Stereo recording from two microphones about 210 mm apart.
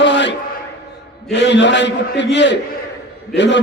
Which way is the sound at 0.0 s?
55° left (ahead or behind).